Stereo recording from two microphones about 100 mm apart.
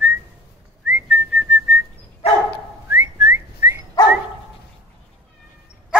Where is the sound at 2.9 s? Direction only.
20° right (ahead or behind).